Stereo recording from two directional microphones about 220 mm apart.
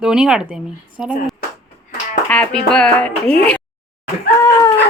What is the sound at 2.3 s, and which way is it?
Speech, 5° left (ahead or behind).